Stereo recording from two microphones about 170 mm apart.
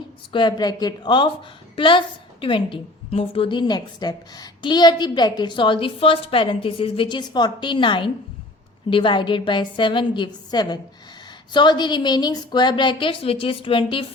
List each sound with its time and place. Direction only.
0.3 s a woman's voice: 25° left (ahead or behind)